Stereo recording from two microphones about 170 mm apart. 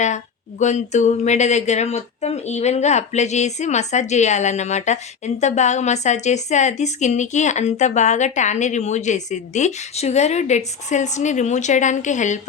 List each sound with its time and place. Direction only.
0.6 s speech: 45° left (ahead or behind)